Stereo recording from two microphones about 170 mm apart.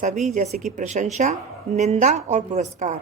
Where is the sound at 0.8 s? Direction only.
45° right (ahead or behind).